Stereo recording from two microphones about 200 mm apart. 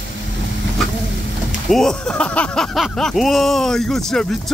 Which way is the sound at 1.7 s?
Centre (ahead or behind).